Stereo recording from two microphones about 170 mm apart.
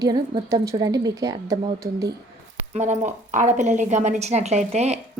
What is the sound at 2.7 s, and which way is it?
A woman's voice, 45° right (ahead or behind).